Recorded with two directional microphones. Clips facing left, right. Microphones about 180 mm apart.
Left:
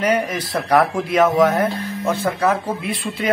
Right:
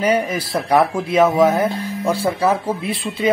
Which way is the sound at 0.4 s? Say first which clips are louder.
Right 1 dB; 30° right (ahead or behind).